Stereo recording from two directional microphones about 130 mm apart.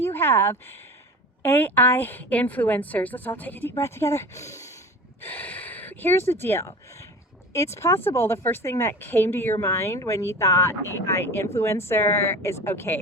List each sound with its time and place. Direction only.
0.0 s a woman's voice: 15° left (ahead or behind)